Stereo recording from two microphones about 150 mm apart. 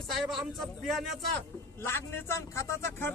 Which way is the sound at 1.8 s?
15° left (ahead or behind).